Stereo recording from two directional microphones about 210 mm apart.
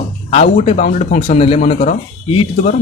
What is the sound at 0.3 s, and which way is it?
Speech, 30° left (ahead or behind).